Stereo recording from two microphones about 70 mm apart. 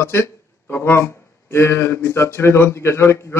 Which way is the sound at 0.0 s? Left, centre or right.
Left.